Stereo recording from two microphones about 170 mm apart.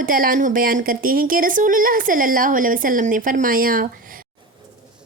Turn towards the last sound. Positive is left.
turn(degrees=-55)  # may be behind; listen again after turning